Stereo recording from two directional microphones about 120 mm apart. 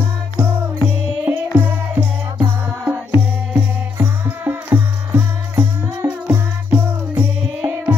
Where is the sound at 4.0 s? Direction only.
15° right (ahead or behind).